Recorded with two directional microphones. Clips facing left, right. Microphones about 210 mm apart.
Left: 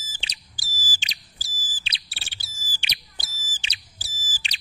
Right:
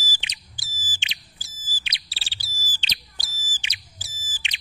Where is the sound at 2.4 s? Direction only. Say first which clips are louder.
Right 2 dB; 15° left (ahead or behind).